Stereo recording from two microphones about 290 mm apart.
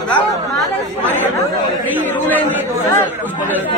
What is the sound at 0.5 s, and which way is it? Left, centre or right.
Speech, centre.